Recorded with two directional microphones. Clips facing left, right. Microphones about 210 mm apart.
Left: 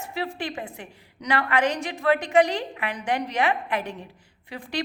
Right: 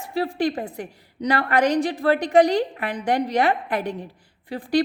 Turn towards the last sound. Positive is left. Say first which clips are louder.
# right 9 dB
turn(degrees=-35)  # may be behind; listen again after turning